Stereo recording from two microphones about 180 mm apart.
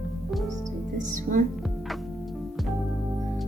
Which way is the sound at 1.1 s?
45° right (ahead or behind).